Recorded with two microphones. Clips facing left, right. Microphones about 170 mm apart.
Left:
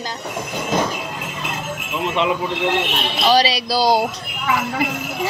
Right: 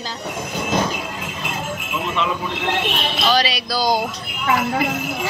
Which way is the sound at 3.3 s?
35° left (ahead or behind).